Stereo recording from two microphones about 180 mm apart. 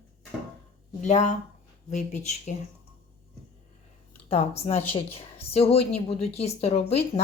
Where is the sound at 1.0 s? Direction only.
40° left (ahead or behind).